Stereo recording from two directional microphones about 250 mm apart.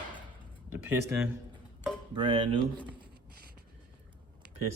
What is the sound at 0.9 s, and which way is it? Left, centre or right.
Speech, centre.